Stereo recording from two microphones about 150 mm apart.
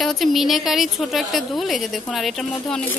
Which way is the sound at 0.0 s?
Centre (ahead or behind).